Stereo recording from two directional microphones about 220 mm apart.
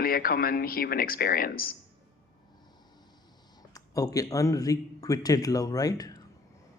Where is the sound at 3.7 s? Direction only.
15° left (ahead or behind).